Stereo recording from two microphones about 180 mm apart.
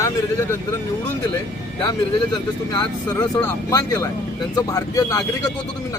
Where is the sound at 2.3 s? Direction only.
20° left (ahead or behind).